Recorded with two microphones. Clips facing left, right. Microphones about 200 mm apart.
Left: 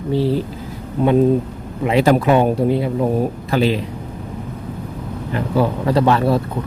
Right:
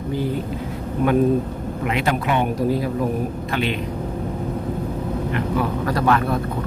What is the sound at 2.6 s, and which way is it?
Speech, 25° left (ahead or behind).